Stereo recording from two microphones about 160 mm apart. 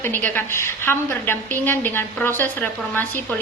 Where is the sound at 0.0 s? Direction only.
10° left (ahead or behind).